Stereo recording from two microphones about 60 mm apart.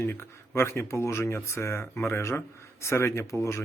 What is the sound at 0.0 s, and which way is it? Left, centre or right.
Speech, left.